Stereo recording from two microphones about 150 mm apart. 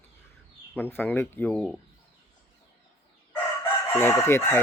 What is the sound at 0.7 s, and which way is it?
Speech, 15° left (ahead or behind).